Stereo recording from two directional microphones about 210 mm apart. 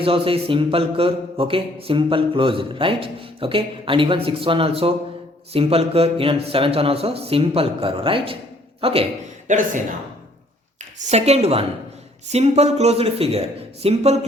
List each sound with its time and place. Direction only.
0.0 s a man's voice: 25° right (ahead or behind)
9.5 s a man's voice: 35° right (ahead or behind)
11.0 s a man's voice: 30° right (ahead or behind)